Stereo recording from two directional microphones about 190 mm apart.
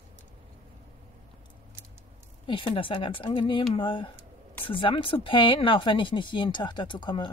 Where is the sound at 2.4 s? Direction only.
25° left (ahead or behind).